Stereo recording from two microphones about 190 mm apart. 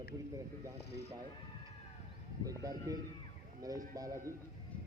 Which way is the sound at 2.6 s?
20° right (ahead or behind).